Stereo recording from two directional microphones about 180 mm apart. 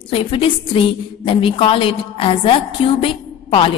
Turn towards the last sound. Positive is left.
turn(degrees=30)  # may be behind; listen again after turning